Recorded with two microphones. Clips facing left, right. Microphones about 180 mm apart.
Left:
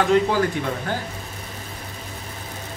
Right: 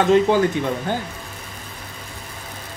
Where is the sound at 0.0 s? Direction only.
25° right (ahead or behind).